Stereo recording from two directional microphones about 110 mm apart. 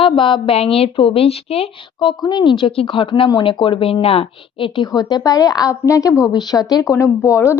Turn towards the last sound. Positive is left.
turn(degrees=25)  # may be behind; listen again after turning